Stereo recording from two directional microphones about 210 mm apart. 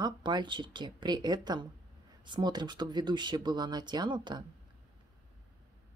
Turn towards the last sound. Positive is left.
turn(degrees=-20)  # may be behind; listen again after turning